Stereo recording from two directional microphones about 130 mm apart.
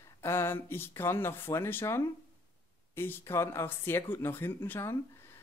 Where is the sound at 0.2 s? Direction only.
20° left (ahead or behind).